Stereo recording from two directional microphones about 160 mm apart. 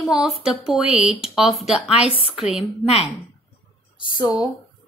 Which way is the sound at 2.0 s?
35° left (ahead or behind).